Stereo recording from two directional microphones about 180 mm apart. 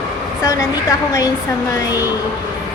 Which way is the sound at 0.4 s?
15° left (ahead or behind).